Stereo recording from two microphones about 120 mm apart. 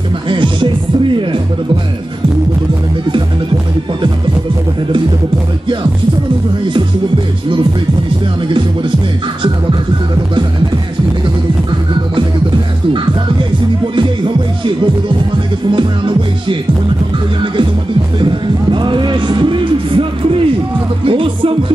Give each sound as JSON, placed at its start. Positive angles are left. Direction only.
{"t": 0.3, "sound": "music", "side_deg": -45}
{"t": 15.7, "sound": "music", "side_deg": -45}
{"t": 18.2, "sound": "music", "side_deg": -40}